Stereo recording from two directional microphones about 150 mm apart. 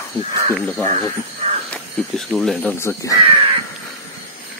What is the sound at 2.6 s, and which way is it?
Speech, 15° left (ahead or behind).